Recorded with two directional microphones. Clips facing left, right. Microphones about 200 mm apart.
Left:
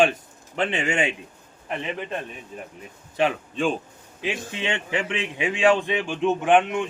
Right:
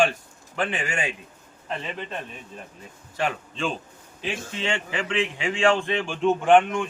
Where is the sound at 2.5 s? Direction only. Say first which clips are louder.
Left 3 dB; 10° left (ahead or behind).